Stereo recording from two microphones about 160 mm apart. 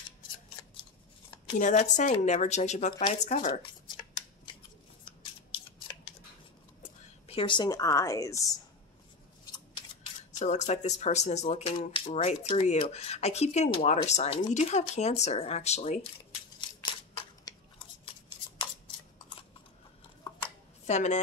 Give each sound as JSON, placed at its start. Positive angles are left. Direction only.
{"t": 1.6, "sound": "speech", "side_deg": 50}
{"t": 4.5, "sound": "scissors", "side_deg": 35}
{"t": 6.8, "sound": "a woman's voice", "side_deg": 35}
{"t": 10.4, "sound": "speech", "side_deg": 45}
{"t": 17.5, "sound": "scissors", "side_deg": 25}
{"t": 20.8, "sound": "a woman's voice", "side_deg": 45}